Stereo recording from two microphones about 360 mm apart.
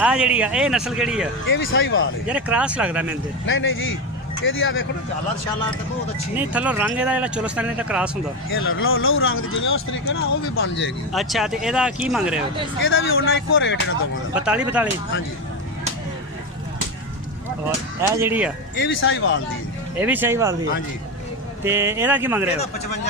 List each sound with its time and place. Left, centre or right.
0.0 s speech: centre
1.5 s speech: left
2.2 s speech: centre
3.4 s speech: left
6.3 s speech: centre
8.5 s speech: left
11.1 s speech: centre
12.8 s speech: left
14.3 s speech: centre
18.1 s speech: centre
18.8 s speech: left
20.0 s speech: centre
21.6 s speech: centre